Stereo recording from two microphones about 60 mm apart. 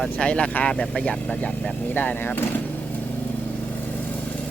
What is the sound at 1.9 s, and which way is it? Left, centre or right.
Speech, left.